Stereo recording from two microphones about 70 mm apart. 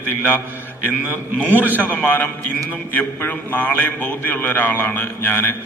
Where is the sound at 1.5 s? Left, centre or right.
Right.